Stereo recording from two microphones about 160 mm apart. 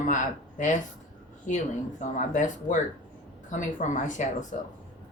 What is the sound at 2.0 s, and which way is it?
Speech, 50° left (ahead or behind).